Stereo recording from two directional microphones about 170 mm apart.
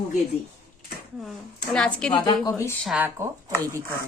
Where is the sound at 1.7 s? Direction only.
5° left (ahead or behind).